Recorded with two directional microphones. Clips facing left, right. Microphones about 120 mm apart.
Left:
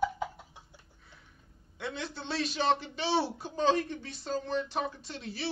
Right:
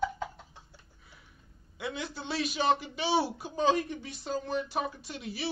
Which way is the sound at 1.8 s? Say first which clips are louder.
Right 1 dB; 5° right (ahead or behind).